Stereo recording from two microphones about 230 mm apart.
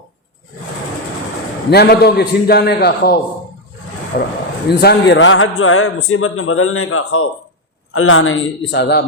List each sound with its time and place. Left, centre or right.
1.7 s a man's voice: left